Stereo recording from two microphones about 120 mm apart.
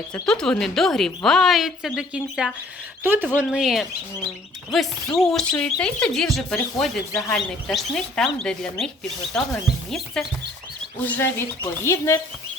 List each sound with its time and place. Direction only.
0.1 s a woman's voice: 5° left (ahead or behind)
3.0 s speech: 15° right (ahead or behind)
3.3 s a woman's voice: 5° right (ahead or behind)
11.0 s speech: 15° left (ahead or behind)